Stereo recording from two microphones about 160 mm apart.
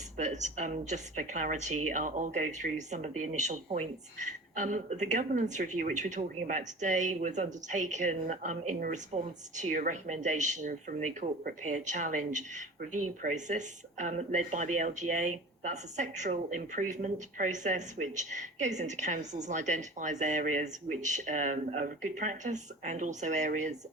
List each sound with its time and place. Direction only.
0.2 s speech: 50° right (ahead or behind)